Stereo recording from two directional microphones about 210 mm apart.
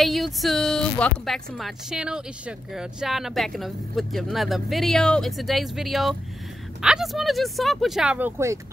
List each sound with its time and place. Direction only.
0.0 s speech: centre (ahead or behind)